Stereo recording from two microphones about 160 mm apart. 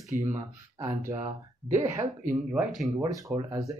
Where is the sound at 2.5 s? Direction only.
5° right (ahead or behind).